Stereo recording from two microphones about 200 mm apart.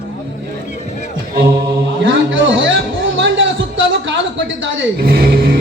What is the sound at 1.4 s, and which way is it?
Mantra, 15° right (ahead or behind).